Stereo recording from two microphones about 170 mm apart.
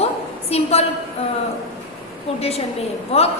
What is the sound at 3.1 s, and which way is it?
Speech, 35° left (ahead or behind).